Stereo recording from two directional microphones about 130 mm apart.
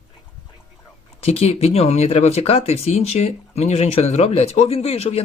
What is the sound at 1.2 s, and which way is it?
Speech, 55° left (ahead or behind).